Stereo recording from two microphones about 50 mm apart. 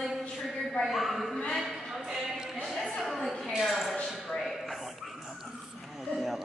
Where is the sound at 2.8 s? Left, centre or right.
Centre.